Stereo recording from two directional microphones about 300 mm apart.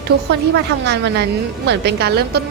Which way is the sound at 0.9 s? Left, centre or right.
Right.